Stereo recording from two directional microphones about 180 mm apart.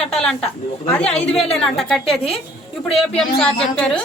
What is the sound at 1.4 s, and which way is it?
A woman's voice, centre (ahead or behind).